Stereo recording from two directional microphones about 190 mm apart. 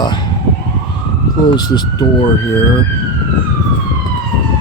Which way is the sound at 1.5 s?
20° left (ahead or behind).